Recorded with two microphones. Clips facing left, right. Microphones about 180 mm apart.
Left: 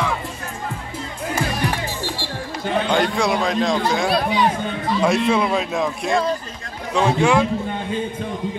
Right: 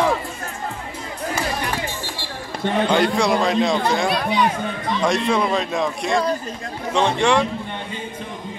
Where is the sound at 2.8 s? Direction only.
Centre (ahead or behind).